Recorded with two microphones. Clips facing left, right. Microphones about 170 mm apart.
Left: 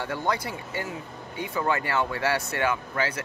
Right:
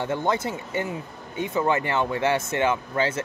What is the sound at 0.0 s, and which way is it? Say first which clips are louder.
Speech: right 4 dB; 20° right (ahead or behind).